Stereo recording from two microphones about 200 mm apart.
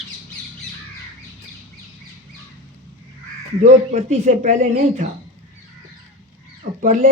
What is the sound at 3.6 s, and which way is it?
Speech, 35° right (ahead or behind).